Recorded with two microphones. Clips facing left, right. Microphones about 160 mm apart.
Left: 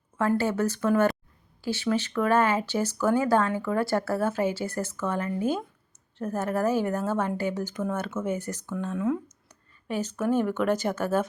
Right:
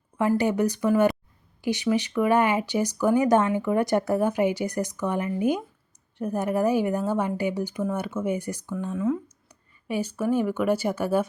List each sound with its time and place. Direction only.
0.2 s speech: 15° right (ahead or behind)
9.5 s speech: 10° right (ahead or behind)